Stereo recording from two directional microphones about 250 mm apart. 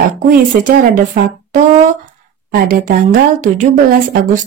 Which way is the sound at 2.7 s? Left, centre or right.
Right.